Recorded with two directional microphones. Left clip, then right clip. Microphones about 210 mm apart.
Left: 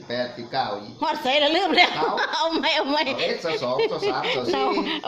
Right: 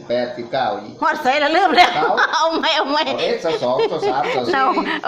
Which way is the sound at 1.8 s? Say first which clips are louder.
Right 7 dB; 30° left (ahead or behind).